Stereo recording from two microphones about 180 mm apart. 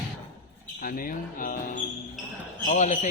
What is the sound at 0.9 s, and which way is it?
A man's voice, 50° left (ahead or behind).